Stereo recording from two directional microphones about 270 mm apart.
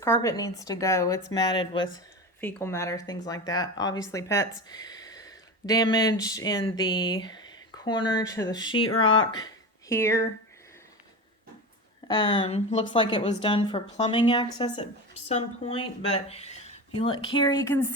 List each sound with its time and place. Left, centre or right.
0.0 s speech: centre
8.7 s speech: left
9.1 s speech: centre
12.0 s speech: centre